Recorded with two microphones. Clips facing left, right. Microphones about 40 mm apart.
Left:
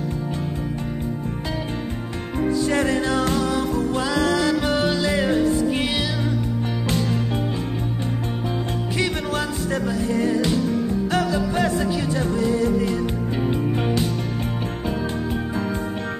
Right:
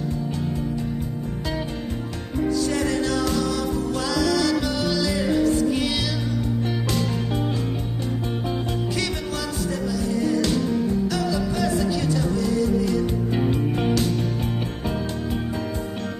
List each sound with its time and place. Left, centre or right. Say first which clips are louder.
2.7 s music: left 2 dB; left
5.9 s music: left 1 dB; left
9.3 s music: left 3 dB; left